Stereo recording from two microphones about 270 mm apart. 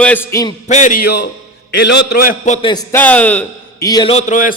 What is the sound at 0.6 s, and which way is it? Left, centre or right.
A man's voice, left.